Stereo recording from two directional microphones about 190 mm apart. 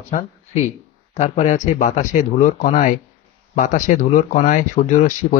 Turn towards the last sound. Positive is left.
turn(degrees=40)  # may be behind; listen again after turning